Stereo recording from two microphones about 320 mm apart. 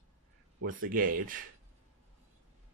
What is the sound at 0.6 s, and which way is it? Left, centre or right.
Speech, right.